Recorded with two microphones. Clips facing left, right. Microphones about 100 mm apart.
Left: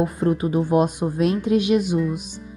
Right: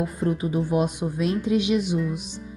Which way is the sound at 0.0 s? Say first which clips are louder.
Left 4 dB; 75° left (ahead or behind).